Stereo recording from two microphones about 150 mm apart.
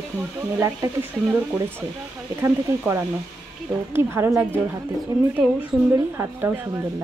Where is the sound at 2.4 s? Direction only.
15° right (ahead or behind).